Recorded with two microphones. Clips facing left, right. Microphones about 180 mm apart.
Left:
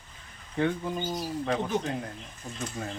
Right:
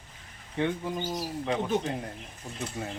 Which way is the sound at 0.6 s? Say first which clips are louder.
Left 1 dB; 15° right (ahead or behind).